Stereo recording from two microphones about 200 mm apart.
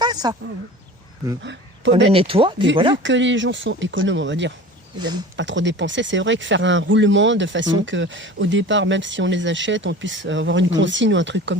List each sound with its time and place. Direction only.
0.0 s a sound: 20° right (ahead or behind)
2.0 s speech: 30° right (ahead or behind)
3.0 s speech: 65° right (ahead or behind)
4.9 s speech: 20° right (ahead or behind)
5.4 s speech: 65° right (ahead or behind)